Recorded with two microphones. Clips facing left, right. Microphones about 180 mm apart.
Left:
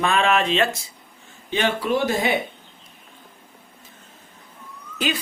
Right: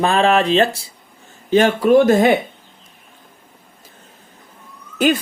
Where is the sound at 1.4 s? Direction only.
45° right (ahead or behind).